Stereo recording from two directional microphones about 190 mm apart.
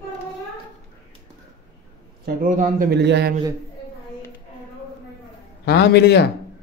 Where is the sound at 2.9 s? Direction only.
65° right (ahead or behind).